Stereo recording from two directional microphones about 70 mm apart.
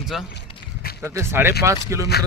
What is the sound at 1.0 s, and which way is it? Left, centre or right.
Speech, right.